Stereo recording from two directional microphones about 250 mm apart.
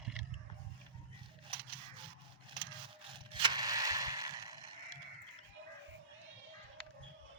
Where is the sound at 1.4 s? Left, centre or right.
Centre.